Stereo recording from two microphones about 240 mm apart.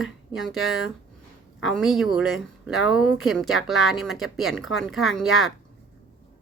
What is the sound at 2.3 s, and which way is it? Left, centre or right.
Speech, left.